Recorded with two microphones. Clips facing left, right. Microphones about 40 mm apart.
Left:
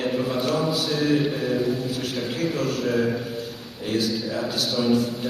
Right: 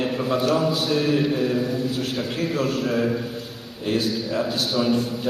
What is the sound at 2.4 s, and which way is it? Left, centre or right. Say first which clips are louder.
Speech: right 1 dB; right.